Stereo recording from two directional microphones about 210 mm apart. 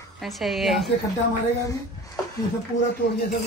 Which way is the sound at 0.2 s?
Centre (ahead or behind).